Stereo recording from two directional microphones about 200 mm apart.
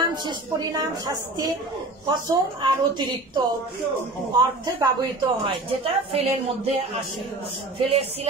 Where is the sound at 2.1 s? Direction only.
20° right (ahead or behind).